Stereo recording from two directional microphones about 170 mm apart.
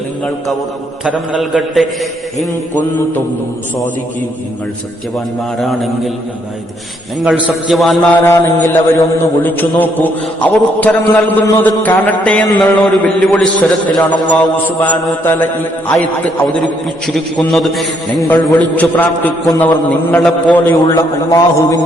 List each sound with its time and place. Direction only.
1.0 s a man's voice: centre (ahead or behind)
5.1 s a man's voice: centre (ahead or behind)
7.3 s a man's voice: centre (ahead or behind)
8.2 s a man's voice: 15° left (ahead or behind)
12.5 s a man's voice: 20° left (ahead or behind)
12.8 s a man's voice: centre (ahead or behind)
17.1 s a man's voice: centre (ahead or behind)
20.7 s a man's voice: 20° left (ahead or behind)